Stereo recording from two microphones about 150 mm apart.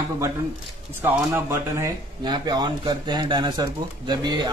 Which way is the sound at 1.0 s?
15° right (ahead or behind).